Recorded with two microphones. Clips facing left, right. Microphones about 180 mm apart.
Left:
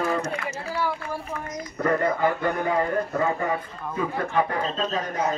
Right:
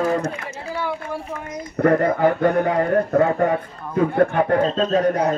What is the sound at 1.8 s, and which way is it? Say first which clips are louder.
Speech: right 6 dB; 65° right (ahead or behind).